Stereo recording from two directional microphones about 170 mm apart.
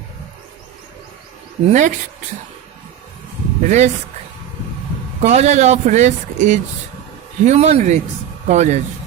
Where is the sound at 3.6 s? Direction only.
45° right (ahead or behind).